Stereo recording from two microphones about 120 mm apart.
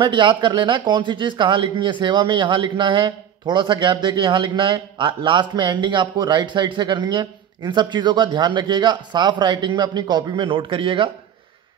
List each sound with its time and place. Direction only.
0.0 s a man's voice: 40° right (ahead or behind)